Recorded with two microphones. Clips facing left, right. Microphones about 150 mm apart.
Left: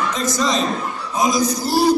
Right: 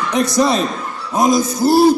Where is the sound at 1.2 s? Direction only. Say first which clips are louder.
Right 5 dB; 55° right (ahead or behind).